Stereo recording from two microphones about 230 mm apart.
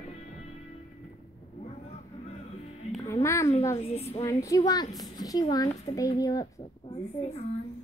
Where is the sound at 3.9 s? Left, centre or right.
Left.